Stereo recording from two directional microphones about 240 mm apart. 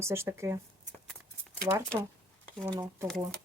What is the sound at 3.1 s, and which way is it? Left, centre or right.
Speech, centre.